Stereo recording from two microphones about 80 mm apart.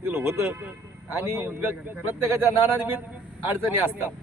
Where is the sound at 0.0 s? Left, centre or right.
Right.